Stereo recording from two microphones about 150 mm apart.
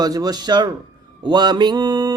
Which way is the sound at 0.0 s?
25° right (ahead or behind).